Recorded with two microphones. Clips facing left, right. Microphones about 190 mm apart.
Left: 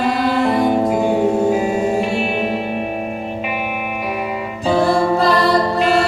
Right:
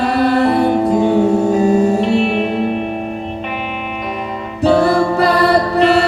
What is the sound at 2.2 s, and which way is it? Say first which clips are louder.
Music: right 4 dB; 5° left (ahead or behind).